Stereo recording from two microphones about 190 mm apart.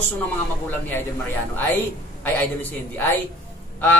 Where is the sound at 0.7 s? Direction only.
10° left (ahead or behind).